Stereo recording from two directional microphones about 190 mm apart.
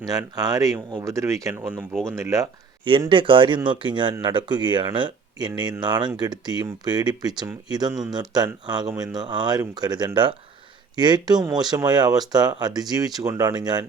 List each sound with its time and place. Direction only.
0.0 s speech: 20° right (ahead or behind)